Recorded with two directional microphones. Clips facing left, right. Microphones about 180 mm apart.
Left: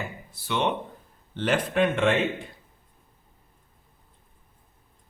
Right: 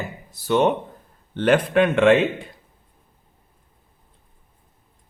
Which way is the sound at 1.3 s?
60° right (ahead or behind).